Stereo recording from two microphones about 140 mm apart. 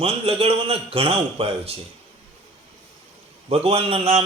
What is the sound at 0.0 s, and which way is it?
A man's voice, 45° right (ahead or behind).